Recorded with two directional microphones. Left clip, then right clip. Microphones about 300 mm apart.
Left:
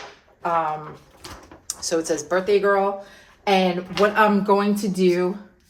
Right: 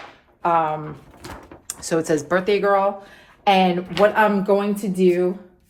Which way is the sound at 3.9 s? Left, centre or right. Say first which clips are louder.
Right 1 dB; centre.